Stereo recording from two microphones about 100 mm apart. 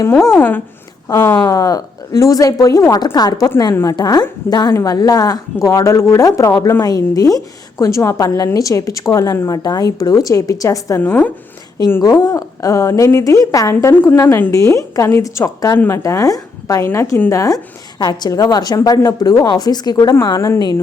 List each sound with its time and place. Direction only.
0.3 s a woman's voice: 20° left (ahead or behind)
1.0 s a woman's voice: 35° left (ahead or behind)
11.0 s speech: 15° left (ahead or behind)
12.0 s a woman's voice: 40° left (ahead or behind)
14.0 s a woman's voice: 20° left (ahead or behind)